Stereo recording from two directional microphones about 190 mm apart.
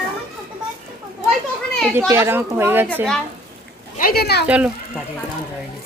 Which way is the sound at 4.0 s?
50° left (ahead or behind).